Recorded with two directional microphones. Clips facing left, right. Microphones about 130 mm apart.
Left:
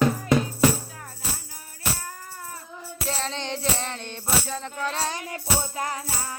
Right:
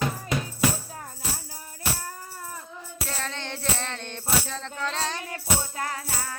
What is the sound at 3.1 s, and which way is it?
Music, 20° left (ahead or behind).